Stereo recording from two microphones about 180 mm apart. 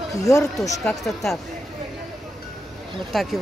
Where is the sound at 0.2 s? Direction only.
15° left (ahead or behind).